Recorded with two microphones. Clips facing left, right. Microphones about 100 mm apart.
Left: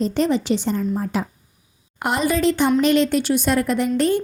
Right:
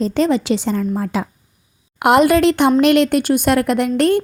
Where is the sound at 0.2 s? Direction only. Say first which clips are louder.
Right 4 dB; 90° right.